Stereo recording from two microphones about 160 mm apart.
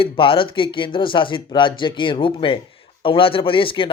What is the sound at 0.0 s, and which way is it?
A man's voice, 35° left (ahead or behind).